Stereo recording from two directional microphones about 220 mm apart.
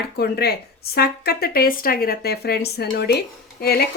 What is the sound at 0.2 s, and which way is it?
A woman's voice, 45° left (ahead or behind).